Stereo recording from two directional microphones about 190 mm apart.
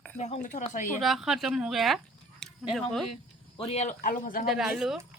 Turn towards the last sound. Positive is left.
turn(degrees=0)  # may be behind; listen again after turning